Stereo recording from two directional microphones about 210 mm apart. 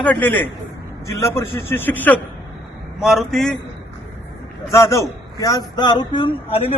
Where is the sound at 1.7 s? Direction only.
10° left (ahead or behind).